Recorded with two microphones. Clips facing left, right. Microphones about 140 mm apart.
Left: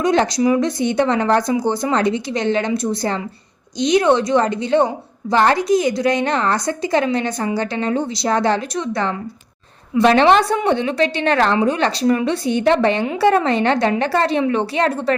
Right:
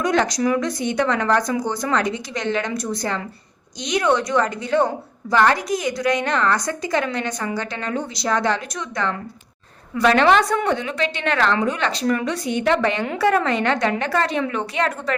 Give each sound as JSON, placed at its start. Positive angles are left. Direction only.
{"t": 0.0, "sound": "a woman's voice", "side_deg": 30}